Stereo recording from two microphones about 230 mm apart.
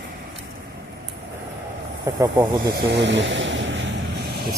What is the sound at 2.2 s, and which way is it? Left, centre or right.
Speech, centre.